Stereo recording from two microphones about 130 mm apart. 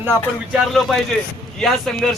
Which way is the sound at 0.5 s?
Centre (ahead or behind).